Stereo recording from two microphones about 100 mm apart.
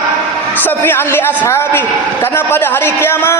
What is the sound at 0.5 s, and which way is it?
A man's voice, 20° left (ahead or behind).